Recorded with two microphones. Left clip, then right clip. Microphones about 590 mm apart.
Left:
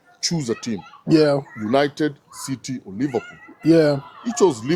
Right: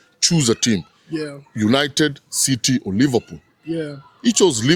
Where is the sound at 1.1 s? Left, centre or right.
Left.